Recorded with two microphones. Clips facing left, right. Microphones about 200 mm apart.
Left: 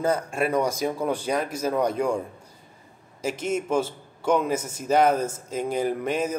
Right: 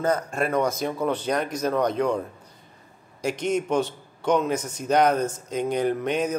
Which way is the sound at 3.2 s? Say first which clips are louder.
Right 2 dB; 5° left (ahead or behind).